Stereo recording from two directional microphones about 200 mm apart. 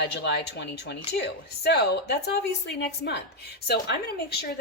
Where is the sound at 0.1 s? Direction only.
60° left (ahead or behind).